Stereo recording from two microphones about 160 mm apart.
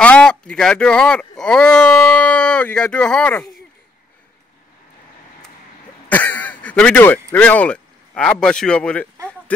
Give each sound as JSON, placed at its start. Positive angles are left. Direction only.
{"t": 0.0, "sound": "speech", "side_deg": 5}
{"t": 6.0, "sound": "speech", "side_deg": 10}